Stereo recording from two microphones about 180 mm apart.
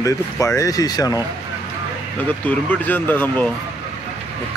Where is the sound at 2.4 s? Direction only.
10° left (ahead or behind).